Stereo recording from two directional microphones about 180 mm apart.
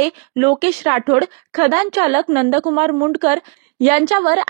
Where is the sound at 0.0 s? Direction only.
35° right (ahead or behind).